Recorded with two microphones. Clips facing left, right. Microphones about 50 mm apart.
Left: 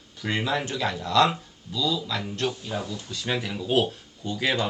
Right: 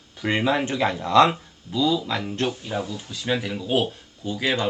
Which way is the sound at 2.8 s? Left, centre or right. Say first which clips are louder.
Right 2 dB; centre.